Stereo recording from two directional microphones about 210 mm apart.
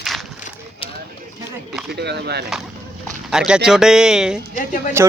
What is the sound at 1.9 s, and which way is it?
Speech, 50° right (ahead or behind).